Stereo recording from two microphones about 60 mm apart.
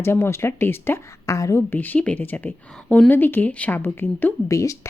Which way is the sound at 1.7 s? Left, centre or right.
Left.